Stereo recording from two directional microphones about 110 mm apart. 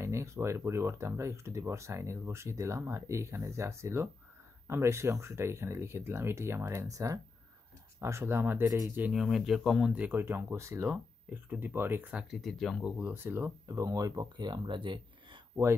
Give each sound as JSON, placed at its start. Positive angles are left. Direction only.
{"t": 0.0, "sound": "speech", "side_deg": -25}
{"t": 8.6, "sound": "speech", "side_deg": -30}
{"t": 9.1, "sound": "speech", "side_deg": 0}
{"t": 9.9, "sound": "speech", "side_deg": -20}
{"t": 12.4, "sound": "speech", "side_deg": 0}
{"t": 12.8, "sound": "speech", "side_deg": -15}